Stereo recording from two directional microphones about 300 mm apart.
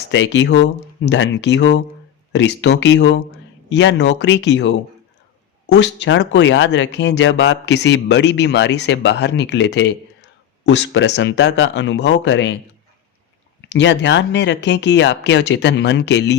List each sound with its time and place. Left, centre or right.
0.1 s speech: left
13.7 s speech: left